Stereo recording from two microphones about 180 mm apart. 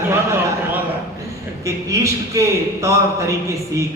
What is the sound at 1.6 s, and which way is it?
A man's voice, 15° right (ahead or behind).